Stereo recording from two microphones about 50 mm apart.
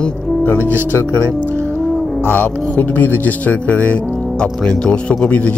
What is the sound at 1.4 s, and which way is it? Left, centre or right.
Music, left.